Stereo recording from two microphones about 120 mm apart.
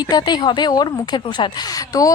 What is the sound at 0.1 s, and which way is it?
Speech, 35° left (ahead or behind).